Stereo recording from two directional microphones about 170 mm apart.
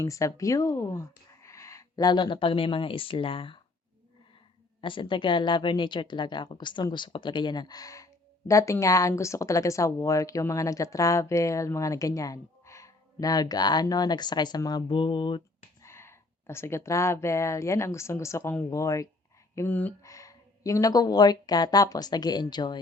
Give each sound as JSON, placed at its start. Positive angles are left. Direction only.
{"t": 0.0, "sound": "speech", "side_deg": 15}
{"t": 4.8, "sound": "speech", "side_deg": 30}
{"t": 15.8, "sound": "speech", "side_deg": 15}